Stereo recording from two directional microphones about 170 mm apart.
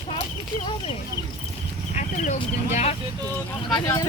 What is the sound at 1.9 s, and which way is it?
Speech, 45° left (ahead or behind).